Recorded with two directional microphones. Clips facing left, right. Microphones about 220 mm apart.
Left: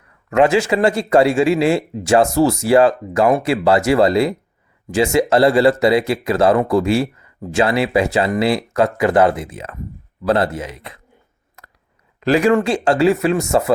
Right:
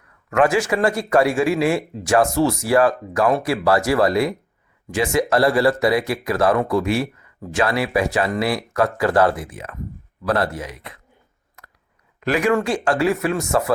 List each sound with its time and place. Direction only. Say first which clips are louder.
0.3 s speech: left 3 dB; 25° left (ahead or behind)
12.2 s speech: left 5 dB; 30° left (ahead or behind)